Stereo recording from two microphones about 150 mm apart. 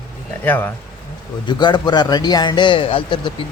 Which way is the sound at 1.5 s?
30° left (ahead or behind).